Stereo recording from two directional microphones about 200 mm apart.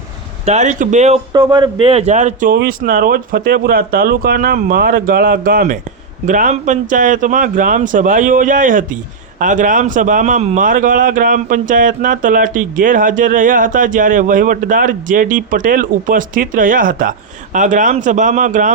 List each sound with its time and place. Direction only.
0.4 s a man's voice: 35° right (ahead or behind)
1.3 s a man's voice: 20° right (ahead or behind); by 18.7 s 40° right (ahead or behind)